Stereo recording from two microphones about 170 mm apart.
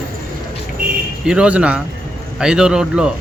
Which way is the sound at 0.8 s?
55° right (ahead or behind).